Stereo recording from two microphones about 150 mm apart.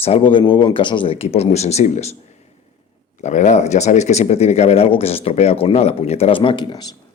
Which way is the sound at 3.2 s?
50° left (ahead or behind).